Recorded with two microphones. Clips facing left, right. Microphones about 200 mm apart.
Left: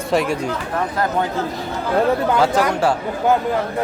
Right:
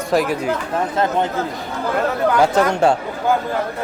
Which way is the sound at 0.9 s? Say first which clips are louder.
Right 2 dB; 25° right (ahead or behind).